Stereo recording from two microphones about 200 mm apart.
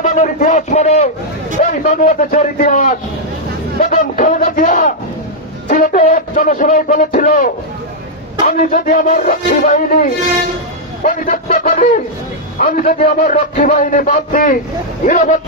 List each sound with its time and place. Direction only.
0.0 s a man's voice: 40° left (ahead or behind)
3.8 s a sound: 40° left (ahead or behind)
5.7 s a man's voice: 40° left (ahead or behind)
11.0 s a man's voice: 40° left (ahead or behind)